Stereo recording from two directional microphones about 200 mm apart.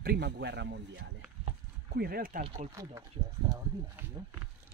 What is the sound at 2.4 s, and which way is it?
Speech, 25° right (ahead or behind).